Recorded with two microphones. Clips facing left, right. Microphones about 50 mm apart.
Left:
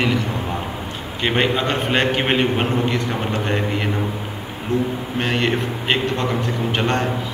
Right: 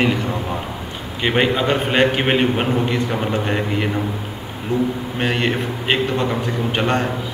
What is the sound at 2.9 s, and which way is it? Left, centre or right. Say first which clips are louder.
Speech: right 2 dB; centre.